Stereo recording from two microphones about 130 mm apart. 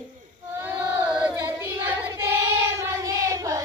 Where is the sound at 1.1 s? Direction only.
10° right (ahead or behind).